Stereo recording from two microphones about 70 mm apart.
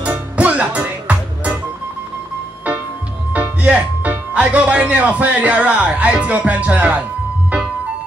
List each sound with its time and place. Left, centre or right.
0.0 s music: right
3.3 s speech: right